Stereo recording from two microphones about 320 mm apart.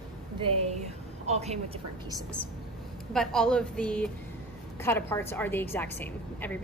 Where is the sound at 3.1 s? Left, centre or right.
Centre.